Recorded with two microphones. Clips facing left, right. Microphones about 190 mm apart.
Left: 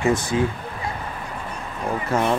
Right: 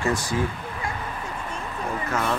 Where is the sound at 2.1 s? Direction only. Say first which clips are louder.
Left 6 dB; 30° left (ahead or behind).